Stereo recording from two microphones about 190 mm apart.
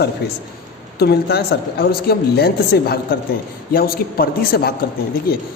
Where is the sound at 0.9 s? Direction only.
55° left (ahead or behind).